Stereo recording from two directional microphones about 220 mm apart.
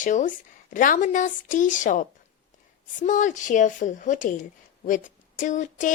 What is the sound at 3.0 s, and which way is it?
A woman's voice, 35° left (ahead or behind).